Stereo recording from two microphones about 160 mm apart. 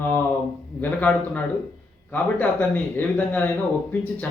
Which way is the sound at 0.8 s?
10° left (ahead or behind).